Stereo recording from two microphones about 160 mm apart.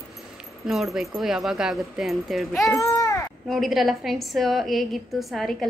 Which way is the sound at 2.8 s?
20° left (ahead or behind).